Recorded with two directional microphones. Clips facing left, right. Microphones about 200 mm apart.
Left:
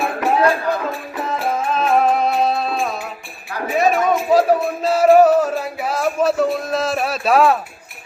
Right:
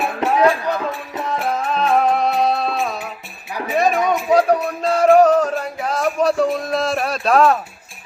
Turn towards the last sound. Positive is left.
turn(degrees=5)  # may be behind; listen again after turning